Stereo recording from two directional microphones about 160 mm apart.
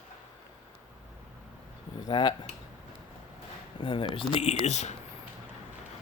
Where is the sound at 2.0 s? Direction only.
30° left (ahead or behind).